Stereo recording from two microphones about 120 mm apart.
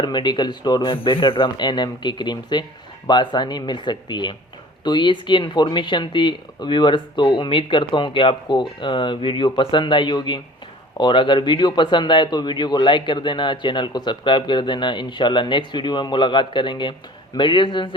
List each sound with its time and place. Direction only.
0.0 s a man's voice: 35° left (ahead or behind)